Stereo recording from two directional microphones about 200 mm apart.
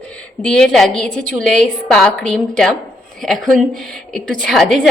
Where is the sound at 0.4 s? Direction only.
5° left (ahead or behind).